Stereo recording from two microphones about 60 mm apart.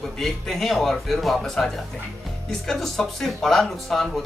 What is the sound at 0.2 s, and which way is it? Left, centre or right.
A man's voice, centre.